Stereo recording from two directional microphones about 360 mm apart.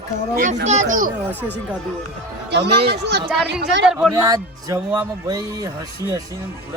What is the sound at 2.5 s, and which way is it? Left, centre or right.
Speech, right.